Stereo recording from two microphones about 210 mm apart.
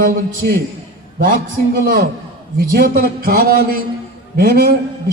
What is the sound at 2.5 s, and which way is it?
A man's voice, 45° right (ahead or behind).